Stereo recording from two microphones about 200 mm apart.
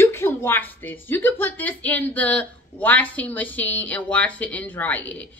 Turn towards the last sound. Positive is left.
turn(degrees=5)  # may be behind; listen again after turning